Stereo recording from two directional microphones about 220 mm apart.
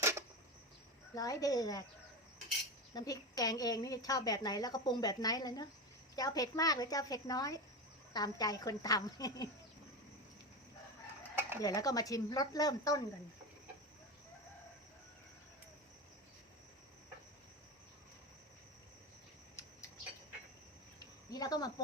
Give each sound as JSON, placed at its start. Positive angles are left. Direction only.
{"t": 0.0, "sound": "a sound", "side_deg": -10}
{"t": 1.1, "sound": "a woman's voice", "side_deg": 15}
{"t": 2.9, "sound": "a woman's voice", "side_deg": 15}
{"t": 11.3, "sound": "dishes", "side_deg": -10}
{"t": 11.6, "sound": "a woman's voice", "side_deg": 15}
{"t": 21.0, "sound": "cricket", "side_deg": 15}